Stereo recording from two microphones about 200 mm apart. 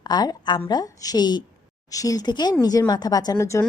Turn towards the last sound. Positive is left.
turn(degrees=15)  # may be behind; listen again after turning